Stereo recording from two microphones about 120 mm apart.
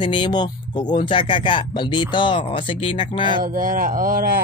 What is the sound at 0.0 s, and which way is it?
Speech, 40° left (ahead or behind).